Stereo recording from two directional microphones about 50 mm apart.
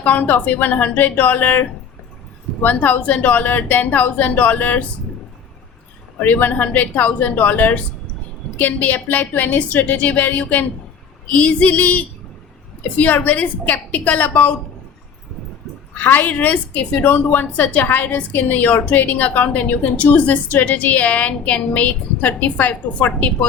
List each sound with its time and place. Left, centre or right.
0.0 s a woman's voice: left
2.8 s a woman's voice: left
6.2 s a woman's voice: left
11.3 s child singing: left
13.0 s a woman's voice: left
16.1 s a woman's voice: left